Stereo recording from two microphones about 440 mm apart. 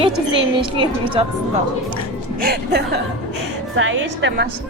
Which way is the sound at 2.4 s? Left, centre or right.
Right.